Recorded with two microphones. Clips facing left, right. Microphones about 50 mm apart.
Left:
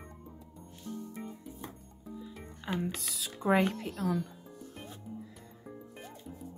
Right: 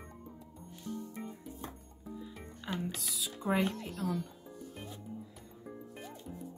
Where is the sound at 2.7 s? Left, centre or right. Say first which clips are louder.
Left 3 dB; centre.